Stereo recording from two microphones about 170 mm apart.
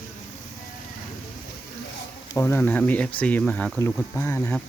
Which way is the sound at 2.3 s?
15° left (ahead or behind).